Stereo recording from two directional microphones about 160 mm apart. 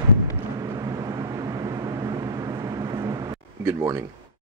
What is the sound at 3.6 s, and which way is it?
Speech, 20° right (ahead or behind).